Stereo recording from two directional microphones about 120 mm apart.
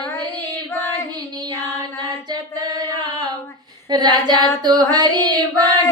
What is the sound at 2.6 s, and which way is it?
Singing, 35° right (ahead or behind).